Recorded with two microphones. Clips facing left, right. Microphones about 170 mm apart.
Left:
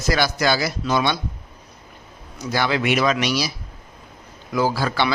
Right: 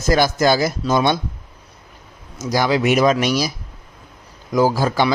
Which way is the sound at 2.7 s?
40° right (ahead or behind).